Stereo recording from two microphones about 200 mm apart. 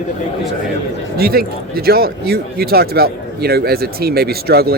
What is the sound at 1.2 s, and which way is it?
Speech, 50° right (ahead or behind).